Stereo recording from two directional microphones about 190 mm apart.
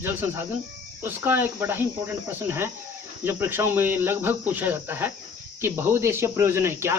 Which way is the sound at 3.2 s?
10° right (ahead or behind).